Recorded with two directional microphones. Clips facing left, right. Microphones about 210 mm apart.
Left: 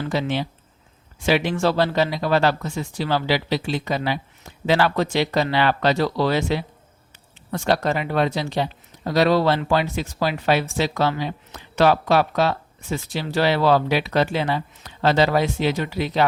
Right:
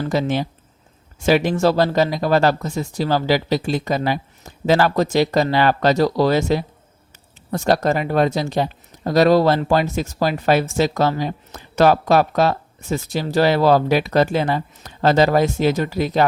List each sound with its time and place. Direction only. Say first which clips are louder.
0.0 s speech: right 3 dB; 45° right (ahead or behind)